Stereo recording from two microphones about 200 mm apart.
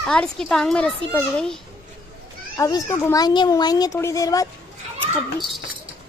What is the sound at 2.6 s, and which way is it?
Speech, 15° left (ahead or behind).